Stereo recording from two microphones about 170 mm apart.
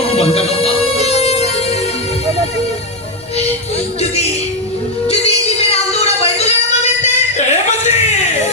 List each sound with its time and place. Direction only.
0.0 s music: 35° left (ahead or behind)
5.0 s music: 35° left (ahead or behind)